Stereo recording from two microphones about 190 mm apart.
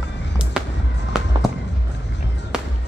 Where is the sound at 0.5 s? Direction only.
5° right (ahead or behind).